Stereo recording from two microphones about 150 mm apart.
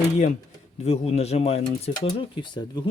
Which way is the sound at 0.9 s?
45° left (ahead or behind).